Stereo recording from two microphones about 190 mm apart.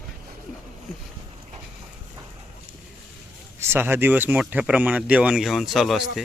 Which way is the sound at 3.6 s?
10° right (ahead or behind).